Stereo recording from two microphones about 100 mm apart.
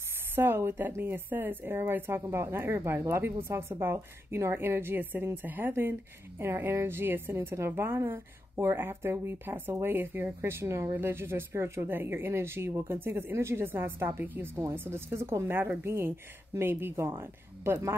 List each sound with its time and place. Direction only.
0.4 s a woman's voice: 25° right (ahead or behind)